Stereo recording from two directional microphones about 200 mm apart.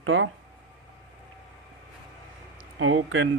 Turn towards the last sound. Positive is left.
turn(degrees=-75)  # may be behind; listen again after turning